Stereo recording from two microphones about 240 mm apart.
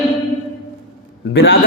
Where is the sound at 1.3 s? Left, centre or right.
Left.